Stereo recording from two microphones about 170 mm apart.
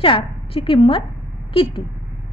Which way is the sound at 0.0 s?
35° left (ahead or behind).